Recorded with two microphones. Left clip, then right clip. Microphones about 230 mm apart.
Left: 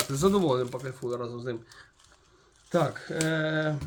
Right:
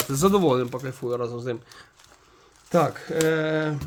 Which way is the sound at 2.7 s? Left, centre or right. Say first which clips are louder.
Right 6 dB; right.